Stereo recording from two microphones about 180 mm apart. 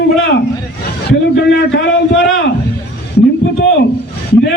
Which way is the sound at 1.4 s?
65° left (ahead or behind).